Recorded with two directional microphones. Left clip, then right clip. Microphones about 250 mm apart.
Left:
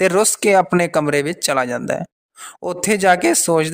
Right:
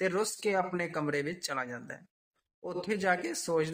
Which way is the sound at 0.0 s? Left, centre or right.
Left.